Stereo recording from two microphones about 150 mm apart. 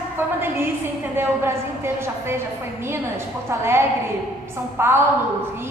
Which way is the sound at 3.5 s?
15° right (ahead or behind).